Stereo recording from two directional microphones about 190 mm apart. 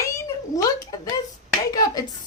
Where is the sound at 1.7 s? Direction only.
20° left (ahead or behind).